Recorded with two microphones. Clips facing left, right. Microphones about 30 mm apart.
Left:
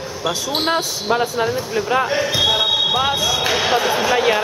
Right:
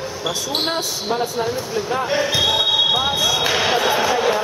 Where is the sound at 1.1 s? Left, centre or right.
Left.